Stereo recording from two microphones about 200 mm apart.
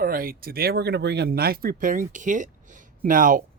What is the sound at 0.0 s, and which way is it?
Speech, 45° right (ahead or behind).